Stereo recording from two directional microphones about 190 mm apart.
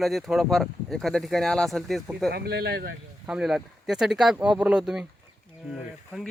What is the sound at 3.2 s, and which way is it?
Speech, 5° right (ahead or behind).